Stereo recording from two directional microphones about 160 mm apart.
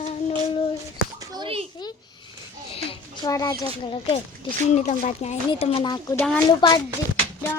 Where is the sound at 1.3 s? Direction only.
35° right (ahead or behind).